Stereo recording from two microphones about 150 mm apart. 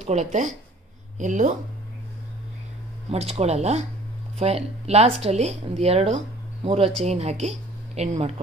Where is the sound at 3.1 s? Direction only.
45° right (ahead or behind).